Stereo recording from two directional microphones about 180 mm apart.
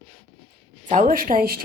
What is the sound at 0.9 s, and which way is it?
Speech, 45° right (ahead or behind).